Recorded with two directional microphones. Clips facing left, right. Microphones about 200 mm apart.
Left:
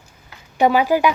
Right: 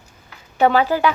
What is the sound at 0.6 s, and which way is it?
Speech, 10° left (ahead or behind).